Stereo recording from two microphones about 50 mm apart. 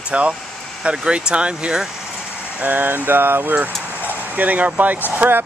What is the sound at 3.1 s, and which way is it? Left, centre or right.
Speech, right.